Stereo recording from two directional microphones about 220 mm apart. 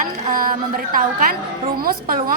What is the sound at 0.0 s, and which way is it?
A woman's voice, 40° right (ahead or behind).